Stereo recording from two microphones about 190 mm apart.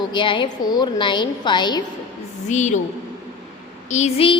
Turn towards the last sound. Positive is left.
turn(degrees=35)  # may be behind; listen again after turning